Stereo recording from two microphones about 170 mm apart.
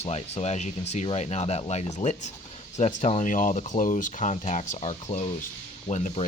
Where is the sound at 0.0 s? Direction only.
40° left (ahead or behind).